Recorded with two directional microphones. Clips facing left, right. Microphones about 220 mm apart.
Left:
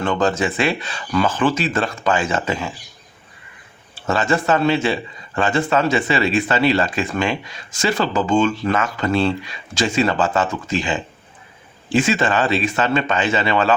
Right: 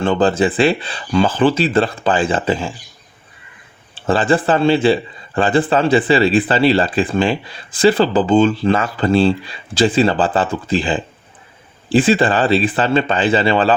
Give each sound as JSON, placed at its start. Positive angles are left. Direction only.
{"t": 0.0, "sound": "speech", "side_deg": -30}
{"t": 4.0, "sound": "speech", "side_deg": -30}